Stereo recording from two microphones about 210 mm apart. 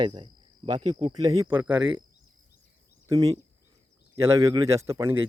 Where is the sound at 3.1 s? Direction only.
15° right (ahead or behind).